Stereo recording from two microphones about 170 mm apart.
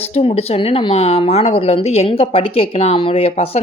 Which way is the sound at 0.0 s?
35° left (ahead or behind).